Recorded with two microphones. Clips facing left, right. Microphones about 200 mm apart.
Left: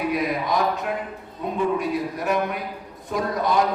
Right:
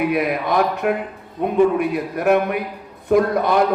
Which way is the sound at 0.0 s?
60° right (ahead or behind).